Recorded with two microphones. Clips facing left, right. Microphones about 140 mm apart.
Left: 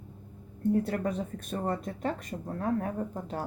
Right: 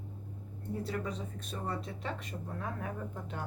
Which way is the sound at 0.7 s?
55° left (ahead or behind).